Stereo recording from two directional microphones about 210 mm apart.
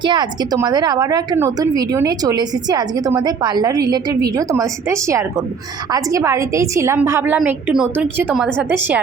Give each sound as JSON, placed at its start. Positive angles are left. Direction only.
{"t": 0.0, "sound": "a woman's voice", "side_deg": -20}